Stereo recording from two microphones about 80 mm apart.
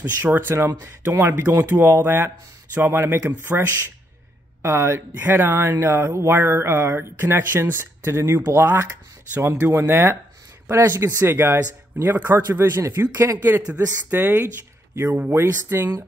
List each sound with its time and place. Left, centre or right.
0.2 s speech: right